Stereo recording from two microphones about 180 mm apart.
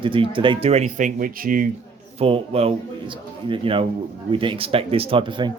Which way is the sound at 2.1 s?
35° right (ahead or behind).